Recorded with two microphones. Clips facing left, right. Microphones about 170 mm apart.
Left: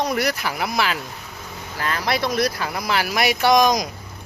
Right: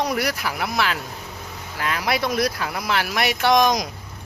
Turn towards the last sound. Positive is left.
turn(degrees=0)  # may be behind; listen again after turning